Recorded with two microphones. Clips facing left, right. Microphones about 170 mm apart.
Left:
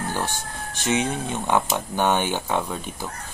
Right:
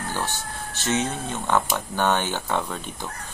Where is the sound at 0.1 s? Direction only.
15° left (ahead or behind).